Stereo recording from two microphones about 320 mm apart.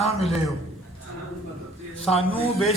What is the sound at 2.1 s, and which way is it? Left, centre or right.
Speech, centre.